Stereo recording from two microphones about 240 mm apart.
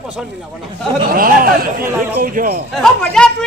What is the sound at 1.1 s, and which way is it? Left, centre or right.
Speech, right.